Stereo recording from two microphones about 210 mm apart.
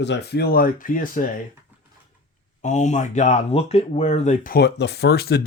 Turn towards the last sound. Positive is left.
turn(degrees=50)  # may be behind; listen again after turning